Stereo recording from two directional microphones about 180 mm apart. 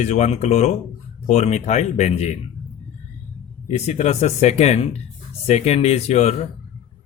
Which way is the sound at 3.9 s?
40° left (ahead or behind).